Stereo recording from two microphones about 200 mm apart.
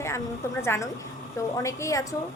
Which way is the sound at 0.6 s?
15° left (ahead or behind).